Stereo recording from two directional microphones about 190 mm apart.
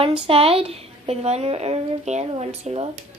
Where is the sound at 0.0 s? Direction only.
30° right (ahead or behind).